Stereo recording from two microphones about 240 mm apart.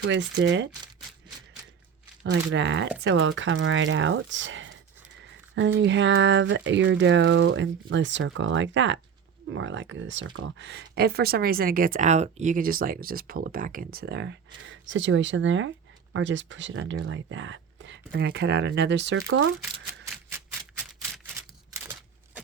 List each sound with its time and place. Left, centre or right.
0.1 s speech: right
2.5 s speech: right